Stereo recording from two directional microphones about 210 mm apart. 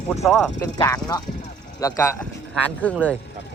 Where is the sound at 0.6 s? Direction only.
15° left (ahead or behind).